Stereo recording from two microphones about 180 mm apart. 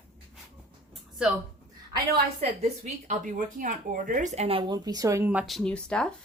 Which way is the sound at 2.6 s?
40° right (ahead or behind).